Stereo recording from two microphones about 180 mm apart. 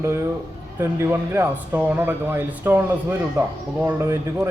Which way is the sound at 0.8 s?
15° right (ahead or behind).